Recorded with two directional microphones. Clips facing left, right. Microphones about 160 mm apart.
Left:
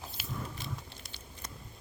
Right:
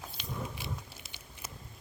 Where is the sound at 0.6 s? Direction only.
5° right (ahead or behind).